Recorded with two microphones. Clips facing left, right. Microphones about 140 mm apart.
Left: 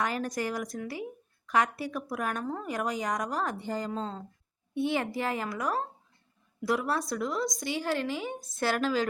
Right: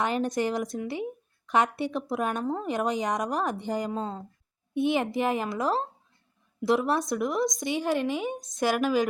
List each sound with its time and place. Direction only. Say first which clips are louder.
0.0 s speech: right 4 dB; 20° right (ahead or behind)